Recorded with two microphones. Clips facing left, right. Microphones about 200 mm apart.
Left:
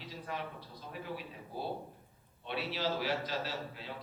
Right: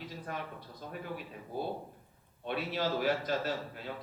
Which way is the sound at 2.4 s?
50° right (ahead or behind).